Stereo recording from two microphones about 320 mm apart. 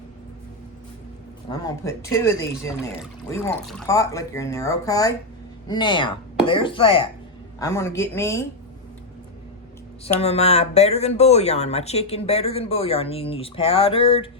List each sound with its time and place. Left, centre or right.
1.5 s speech: centre
10.0 s speech: centre